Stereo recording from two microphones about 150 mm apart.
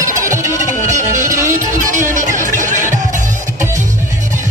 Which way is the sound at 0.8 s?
55° right (ahead or behind).